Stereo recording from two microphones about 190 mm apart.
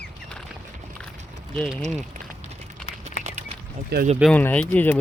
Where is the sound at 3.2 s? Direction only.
45° left (ahead or behind).